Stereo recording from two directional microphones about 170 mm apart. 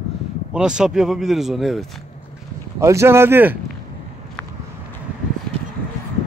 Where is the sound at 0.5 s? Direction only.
5° right (ahead or behind).